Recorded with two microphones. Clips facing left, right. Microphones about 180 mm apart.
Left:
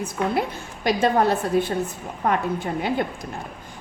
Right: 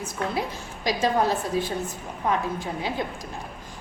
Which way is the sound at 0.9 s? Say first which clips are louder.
Left 4 dB; 60° left (ahead or behind).